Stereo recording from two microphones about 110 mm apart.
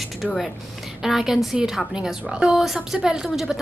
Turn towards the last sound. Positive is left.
turn(degrees=-5)  # may be behind; listen again after turning